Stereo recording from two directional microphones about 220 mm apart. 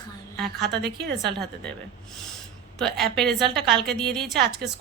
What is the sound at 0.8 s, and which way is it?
Speech, 50° right (ahead or behind).